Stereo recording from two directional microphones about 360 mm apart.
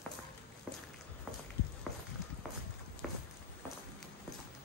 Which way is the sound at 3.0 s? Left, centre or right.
Centre.